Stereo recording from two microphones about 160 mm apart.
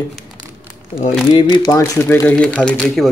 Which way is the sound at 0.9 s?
55° left (ahead or behind).